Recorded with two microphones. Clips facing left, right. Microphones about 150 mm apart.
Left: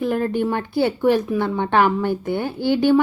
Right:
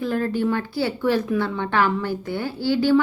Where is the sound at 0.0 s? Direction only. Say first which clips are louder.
Left 2 dB; 20° left (ahead or behind).